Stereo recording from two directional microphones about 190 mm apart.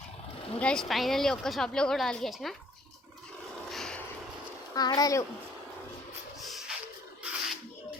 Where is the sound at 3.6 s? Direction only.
Centre (ahead or behind).